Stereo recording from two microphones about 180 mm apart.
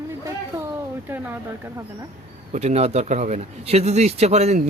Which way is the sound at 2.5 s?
35° right (ahead or behind).